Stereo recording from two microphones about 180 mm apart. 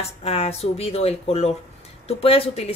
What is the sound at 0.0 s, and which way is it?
Speech, 35° left (ahead or behind).